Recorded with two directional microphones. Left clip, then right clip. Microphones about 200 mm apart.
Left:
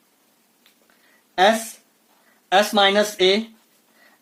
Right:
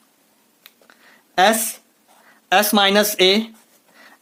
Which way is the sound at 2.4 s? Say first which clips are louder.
Right 1 dB; 35° right (ahead or behind).